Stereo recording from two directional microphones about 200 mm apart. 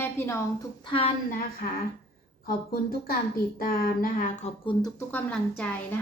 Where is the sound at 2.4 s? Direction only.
50° left (ahead or behind).